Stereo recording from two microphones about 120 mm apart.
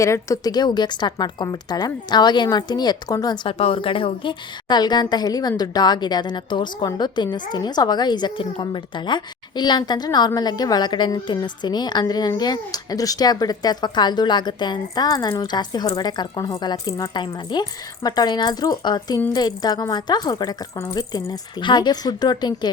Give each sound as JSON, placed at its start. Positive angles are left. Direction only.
{"t": 0.0, "sound": "a woman's voice", "side_deg": 25}
{"t": 3.6, "sound": "a woman's voice", "side_deg": 50}